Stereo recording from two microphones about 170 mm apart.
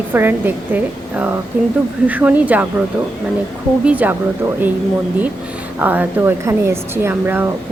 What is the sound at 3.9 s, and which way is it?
Speech, 10° right (ahead or behind).